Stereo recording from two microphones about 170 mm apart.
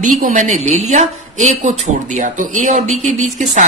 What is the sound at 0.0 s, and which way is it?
Speech, 50° right (ahead or behind).